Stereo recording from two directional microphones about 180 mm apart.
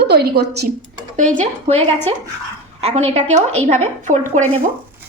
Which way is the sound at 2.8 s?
35° right (ahead or behind).